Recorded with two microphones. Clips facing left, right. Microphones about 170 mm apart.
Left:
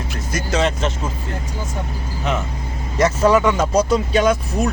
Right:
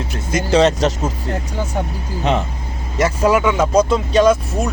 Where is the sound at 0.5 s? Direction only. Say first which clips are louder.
Right 6 dB; 35° right (ahead or behind).